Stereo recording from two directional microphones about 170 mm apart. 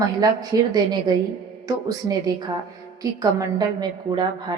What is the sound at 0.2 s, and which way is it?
A woman's voice, 20° right (ahead or behind).